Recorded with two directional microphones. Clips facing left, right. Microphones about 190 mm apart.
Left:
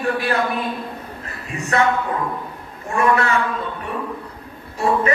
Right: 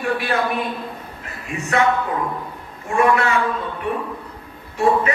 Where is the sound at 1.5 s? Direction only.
35° left (ahead or behind).